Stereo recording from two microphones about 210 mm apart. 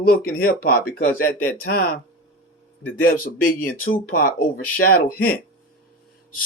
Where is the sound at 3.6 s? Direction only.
40° left (ahead or behind).